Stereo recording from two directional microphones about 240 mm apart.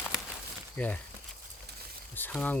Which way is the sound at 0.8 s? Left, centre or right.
Centre.